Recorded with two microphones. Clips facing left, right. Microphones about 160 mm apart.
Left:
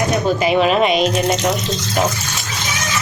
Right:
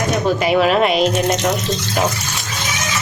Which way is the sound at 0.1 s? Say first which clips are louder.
Even; centre (ahead or behind).